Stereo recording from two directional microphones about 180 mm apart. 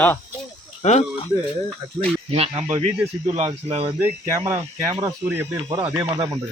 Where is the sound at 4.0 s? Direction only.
15° right (ahead or behind).